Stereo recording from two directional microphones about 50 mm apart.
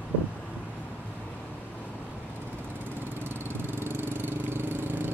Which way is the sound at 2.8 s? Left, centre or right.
Right.